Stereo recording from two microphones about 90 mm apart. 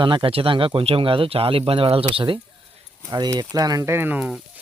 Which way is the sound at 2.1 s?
65° right (ahead or behind).